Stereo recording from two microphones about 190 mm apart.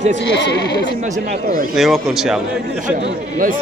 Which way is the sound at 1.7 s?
Centre (ahead or behind).